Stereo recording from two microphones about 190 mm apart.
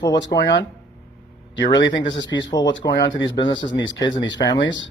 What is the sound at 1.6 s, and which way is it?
A man's voice, 70° left (ahead or behind).